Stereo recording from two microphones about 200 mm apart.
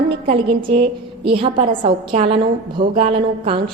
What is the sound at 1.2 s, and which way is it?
A woman's voice, 25° right (ahead or behind).